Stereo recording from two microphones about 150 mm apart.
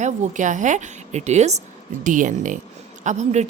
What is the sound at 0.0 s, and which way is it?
Speech, 55° right (ahead or behind).